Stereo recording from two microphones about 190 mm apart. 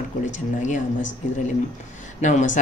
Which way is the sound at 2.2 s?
40° left (ahead or behind).